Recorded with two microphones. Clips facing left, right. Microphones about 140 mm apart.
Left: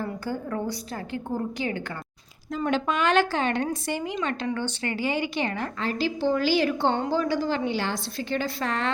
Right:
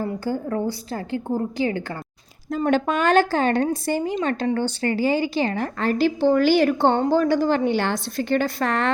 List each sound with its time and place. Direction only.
0.0 s a woman's voice: 35° right (ahead or behind)
2.5 s a woman's voice: 45° right (ahead or behind)
5.8 s a woman's voice: 55° right (ahead or behind)